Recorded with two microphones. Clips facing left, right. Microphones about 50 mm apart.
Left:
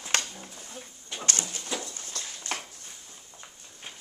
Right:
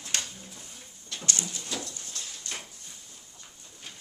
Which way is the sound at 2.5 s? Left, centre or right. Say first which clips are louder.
Left 6 dB; left.